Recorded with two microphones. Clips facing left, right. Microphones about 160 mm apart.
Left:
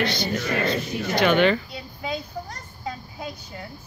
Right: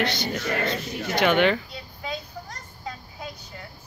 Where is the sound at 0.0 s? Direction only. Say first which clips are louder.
Left 2 dB; 20° right (ahead or behind).